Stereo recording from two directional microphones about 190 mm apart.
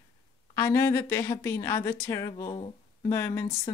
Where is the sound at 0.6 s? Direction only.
15° left (ahead or behind).